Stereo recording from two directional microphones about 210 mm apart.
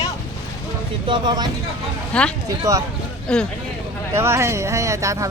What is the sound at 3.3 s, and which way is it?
Speech, 5° left (ahead or behind).